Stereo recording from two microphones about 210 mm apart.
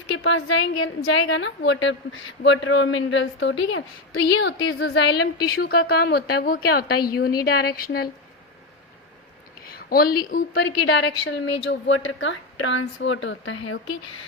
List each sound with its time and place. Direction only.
0.2 s a woman's voice: 70° left (ahead or behind); by 8.1 s 50° left (ahead or behind)
9.7 s a woman's voice: 45° left (ahead or behind); by 13.7 s 65° left (ahead or behind)